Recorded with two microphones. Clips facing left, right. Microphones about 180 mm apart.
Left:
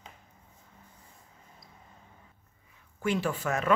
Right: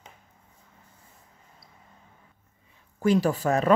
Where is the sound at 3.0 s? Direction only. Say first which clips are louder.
Right 7 dB; 40° right (ahead or behind).